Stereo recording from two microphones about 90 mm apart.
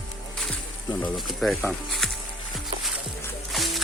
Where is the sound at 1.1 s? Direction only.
Centre (ahead or behind).